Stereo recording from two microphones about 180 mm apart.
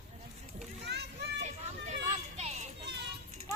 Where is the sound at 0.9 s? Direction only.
65° right (ahead or behind).